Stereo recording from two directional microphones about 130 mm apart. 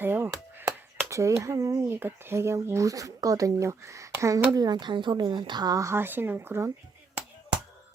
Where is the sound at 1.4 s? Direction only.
25° right (ahead or behind).